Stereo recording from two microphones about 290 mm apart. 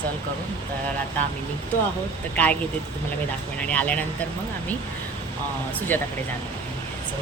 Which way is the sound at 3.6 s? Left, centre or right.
Centre.